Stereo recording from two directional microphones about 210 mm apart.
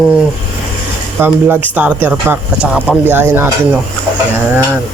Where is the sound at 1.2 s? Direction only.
10° right (ahead or behind).